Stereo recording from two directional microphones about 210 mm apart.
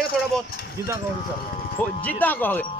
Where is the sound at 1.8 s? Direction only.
10° left (ahead or behind).